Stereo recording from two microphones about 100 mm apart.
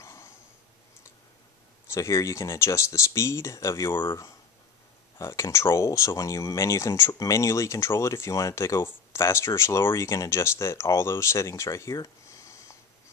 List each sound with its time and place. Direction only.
0.0 s a sound: 30° left (ahead or behind)
1.9 s speech: 30° left (ahead or behind)
5.2 s speech: 30° left (ahead or behind)